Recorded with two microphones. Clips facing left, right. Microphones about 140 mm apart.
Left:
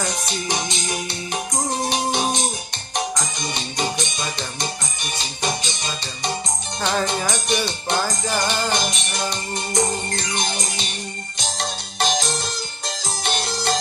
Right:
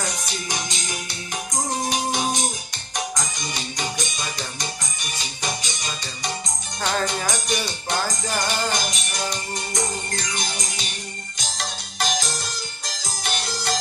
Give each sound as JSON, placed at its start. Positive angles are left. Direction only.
{"t": 0.2, "sound": "music", "side_deg": 25}
{"t": 3.5, "sound": "music", "side_deg": 25}